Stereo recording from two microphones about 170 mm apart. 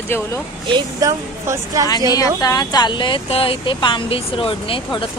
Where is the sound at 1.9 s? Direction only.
20° left (ahead or behind).